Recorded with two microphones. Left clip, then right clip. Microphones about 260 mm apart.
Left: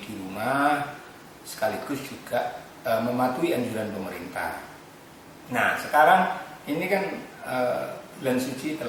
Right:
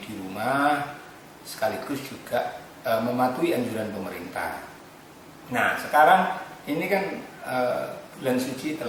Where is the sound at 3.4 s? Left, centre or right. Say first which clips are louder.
Right 1 dB; centre.